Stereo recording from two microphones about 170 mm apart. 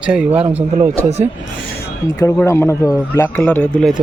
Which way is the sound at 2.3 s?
15° left (ahead or behind).